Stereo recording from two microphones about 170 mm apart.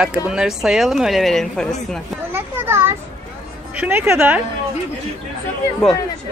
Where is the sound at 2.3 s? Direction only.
15° right (ahead or behind).